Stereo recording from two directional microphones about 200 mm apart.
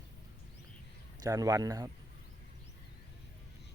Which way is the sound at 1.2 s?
15° right (ahead or behind).